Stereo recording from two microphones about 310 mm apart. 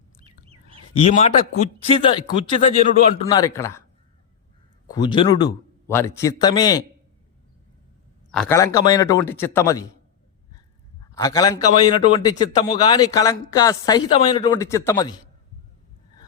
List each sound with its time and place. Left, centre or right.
0.2 s bird: centre
0.9 s a man's voice: centre
4.9 s a man's voice: centre
8.3 s a man's voice: centre
11.1 s a man's voice: centre